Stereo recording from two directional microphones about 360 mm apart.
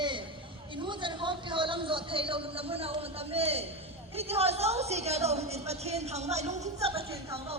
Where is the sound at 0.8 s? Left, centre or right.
Centre.